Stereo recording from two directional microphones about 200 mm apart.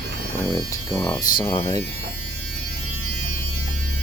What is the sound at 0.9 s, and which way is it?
Speech, 15° left (ahead or behind).